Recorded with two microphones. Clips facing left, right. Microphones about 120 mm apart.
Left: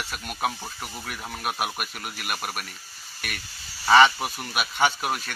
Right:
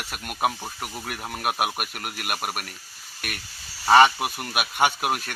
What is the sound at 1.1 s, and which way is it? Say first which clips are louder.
Speech: right 3 dB; 50° right (ahead or behind).